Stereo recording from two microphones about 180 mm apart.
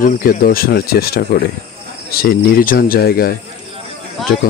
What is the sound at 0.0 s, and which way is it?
Speech, 50° left (ahead or behind).